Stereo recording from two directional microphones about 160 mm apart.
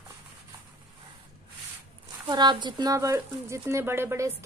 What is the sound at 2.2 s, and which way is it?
Speech, 30° right (ahead or behind).